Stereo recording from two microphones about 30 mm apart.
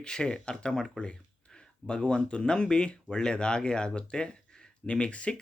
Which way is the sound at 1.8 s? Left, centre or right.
Left.